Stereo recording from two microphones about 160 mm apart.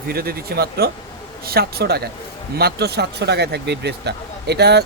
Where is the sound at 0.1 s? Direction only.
75° right (ahead or behind).